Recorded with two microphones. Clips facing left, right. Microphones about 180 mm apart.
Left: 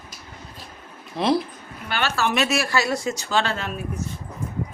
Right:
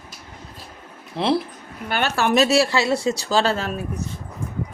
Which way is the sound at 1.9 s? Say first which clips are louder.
Right 2 dB; 50° right (ahead or behind).